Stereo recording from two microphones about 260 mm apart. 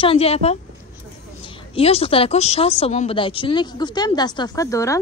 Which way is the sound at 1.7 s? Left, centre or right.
Left.